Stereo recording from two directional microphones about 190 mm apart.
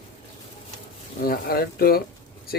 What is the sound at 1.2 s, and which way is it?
Speech, 55° left (ahead or behind).